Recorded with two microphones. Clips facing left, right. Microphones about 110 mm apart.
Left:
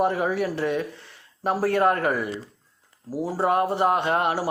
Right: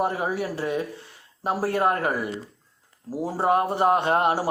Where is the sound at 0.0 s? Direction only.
35° right (ahead or behind).